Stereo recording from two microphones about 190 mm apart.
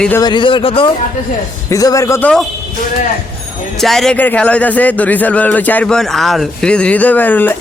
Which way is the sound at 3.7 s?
Centre (ahead or behind).